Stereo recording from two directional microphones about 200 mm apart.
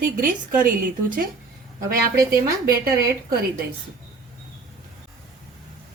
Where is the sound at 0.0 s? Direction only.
45° right (ahead or behind).